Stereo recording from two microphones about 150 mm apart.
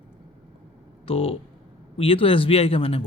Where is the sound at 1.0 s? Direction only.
40° left (ahead or behind).